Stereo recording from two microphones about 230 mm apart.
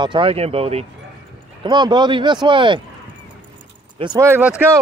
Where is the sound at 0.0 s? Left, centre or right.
Right.